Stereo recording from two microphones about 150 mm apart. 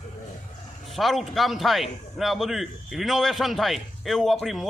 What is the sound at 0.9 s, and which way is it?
A man's voice, centre (ahead or behind).